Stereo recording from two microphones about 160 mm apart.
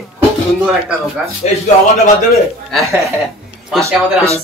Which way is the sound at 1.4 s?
45° left (ahead or behind).